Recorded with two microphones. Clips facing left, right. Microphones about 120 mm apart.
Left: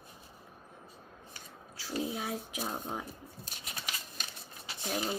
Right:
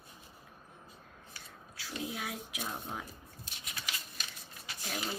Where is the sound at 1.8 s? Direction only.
30° left (ahead or behind).